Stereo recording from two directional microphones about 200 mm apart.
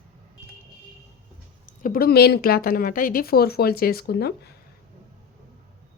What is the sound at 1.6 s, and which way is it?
Speech, 45° left (ahead or behind).